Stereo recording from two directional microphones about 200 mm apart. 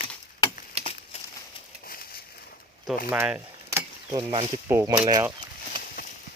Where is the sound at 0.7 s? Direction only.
30° right (ahead or behind).